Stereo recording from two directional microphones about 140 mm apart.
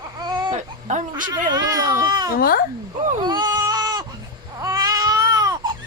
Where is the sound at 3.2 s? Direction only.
30° right (ahead or behind).